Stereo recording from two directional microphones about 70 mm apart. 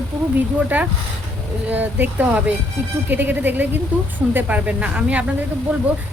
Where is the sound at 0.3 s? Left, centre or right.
Right.